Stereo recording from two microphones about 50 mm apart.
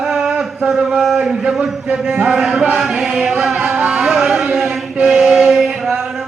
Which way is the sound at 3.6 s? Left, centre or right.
Right.